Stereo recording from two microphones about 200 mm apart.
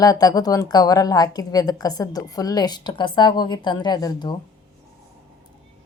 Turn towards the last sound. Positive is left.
turn(degrees=20)  # may be behind; listen again after turning